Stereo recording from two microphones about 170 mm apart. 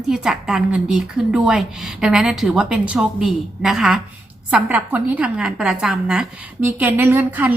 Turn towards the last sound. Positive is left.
turn(degrees=-10)  # may be behind; listen again after turning